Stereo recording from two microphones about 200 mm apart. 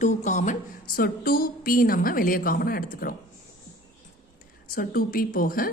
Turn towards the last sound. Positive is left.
turn(degrees=45)  # may be behind; listen again after turning